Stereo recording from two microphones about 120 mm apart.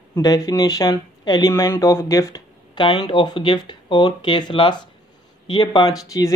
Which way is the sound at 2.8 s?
45° left (ahead or behind).